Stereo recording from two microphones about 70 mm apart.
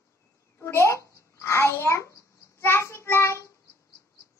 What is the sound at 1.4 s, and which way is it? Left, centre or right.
Child singing, left.